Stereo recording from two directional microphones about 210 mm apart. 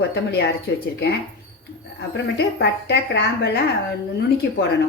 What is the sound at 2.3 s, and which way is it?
A woman's voice, 50° left (ahead or behind).